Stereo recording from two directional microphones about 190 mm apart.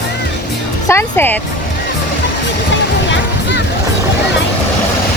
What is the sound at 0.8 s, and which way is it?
Music, 10° left (ahead or behind).